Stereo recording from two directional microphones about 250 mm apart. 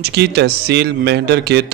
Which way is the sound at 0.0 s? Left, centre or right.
Right.